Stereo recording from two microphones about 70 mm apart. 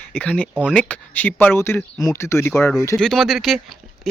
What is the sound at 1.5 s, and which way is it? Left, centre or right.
Speech, left.